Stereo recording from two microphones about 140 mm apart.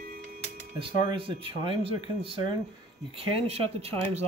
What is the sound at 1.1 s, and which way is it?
Speech, 40° right (ahead or behind).